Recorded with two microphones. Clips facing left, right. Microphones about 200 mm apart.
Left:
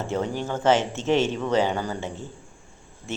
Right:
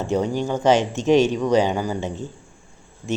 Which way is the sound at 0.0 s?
15° right (ahead or behind).